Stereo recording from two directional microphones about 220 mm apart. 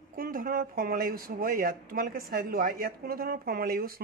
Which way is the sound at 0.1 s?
40° right (ahead or behind).